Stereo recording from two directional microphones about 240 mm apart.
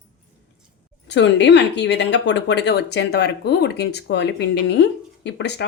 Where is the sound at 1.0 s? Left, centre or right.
Left.